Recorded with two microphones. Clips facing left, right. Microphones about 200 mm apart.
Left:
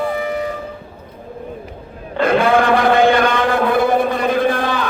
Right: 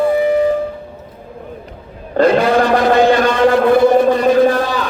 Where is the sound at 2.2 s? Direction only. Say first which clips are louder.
Right 6 dB; 40° right (ahead or behind).